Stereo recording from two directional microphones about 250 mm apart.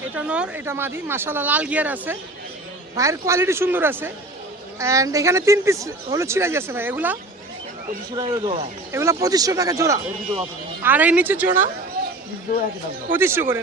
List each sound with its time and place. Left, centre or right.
0.1 s speech: centre; by 8.7 s right
8.9 s speech: centre
13.1 s speech: centre